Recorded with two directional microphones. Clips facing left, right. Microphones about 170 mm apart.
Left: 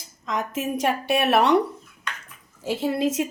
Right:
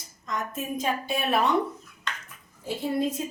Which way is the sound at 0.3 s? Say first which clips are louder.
Left 5 dB; 90° left.